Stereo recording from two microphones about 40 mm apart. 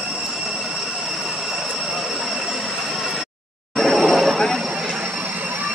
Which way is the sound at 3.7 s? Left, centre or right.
Centre.